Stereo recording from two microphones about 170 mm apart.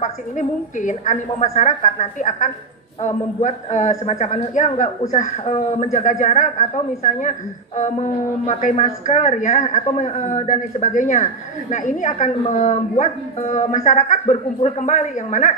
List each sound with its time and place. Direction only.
0.4 s a man's voice: 45° left (ahead or behind)